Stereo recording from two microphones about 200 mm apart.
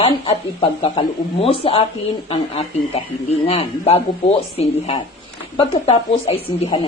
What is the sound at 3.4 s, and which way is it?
A man's voice, 30° left (ahead or behind).